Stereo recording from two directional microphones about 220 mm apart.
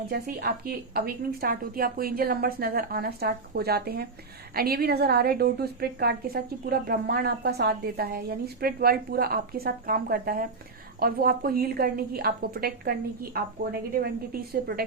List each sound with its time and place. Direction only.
0.1 s a woman's voice: 45° right (ahead or behind)
14.5 s a woman's voice: 45° right (ahead or behind)